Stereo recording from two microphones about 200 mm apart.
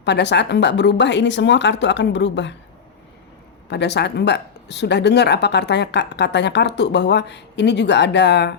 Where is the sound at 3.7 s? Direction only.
60° left (ahead or behind).